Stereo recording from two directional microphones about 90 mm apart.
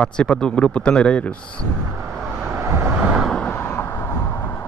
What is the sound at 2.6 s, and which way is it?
Vehicle, 30° right (ahead or behind).